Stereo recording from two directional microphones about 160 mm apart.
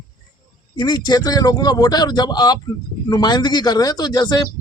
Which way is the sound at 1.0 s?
25° left (ahead or behind).